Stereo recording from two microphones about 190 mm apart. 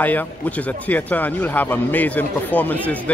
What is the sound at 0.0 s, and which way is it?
A man's voice, 10° left (ahead or behind).